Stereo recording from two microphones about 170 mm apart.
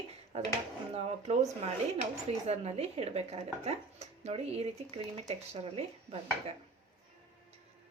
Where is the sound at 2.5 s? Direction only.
40° right (ahead or behind).